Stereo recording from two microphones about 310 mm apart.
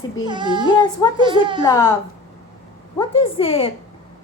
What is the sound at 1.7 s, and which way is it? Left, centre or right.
Speech, centre.